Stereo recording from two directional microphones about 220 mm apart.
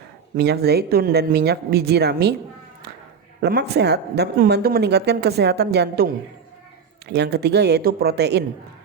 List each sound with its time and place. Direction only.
0.3 s speech: 45° right (ahead or behind)
3.4 s speech: 50° right (ahead or behind)
7.1 s speech: 50° right (ahead or behind)